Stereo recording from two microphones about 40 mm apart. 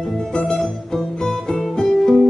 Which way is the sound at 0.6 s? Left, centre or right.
Centre.